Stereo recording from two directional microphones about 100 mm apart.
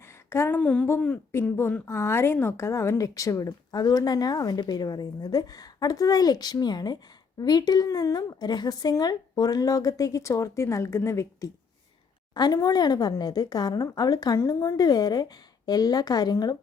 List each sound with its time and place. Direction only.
0.3 s speech: 25° left (ahead or behind)
0.6 s a woman's voice: 10° left (ahead or behind); by 11.5 s 30° left (ahead or behind)
12.3 s a woman's voice: 45° left (ahead or behind)